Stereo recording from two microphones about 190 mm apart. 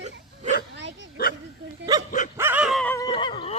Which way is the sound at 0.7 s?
70° right (ahead or behind).